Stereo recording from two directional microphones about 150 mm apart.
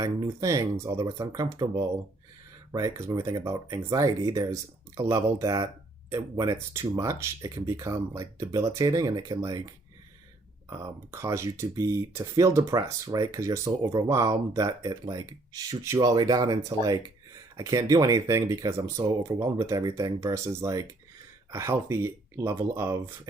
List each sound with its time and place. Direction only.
0.0 s speech: 20° right (ahead or behind)
2.7 s speech: 20° right (ahead or behind)
10.7 s speech: 20° right (ahead or behind)